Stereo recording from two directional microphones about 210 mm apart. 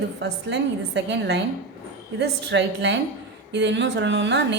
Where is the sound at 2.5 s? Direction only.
55° right (ahead or behind).